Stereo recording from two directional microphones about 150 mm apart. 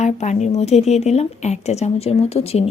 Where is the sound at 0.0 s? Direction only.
50° left (ahead or behind).